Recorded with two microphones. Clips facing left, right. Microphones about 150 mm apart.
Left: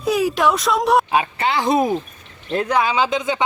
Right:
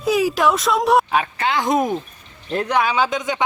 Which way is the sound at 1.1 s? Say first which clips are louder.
Left 1 dB; 10° left (ahead or behind).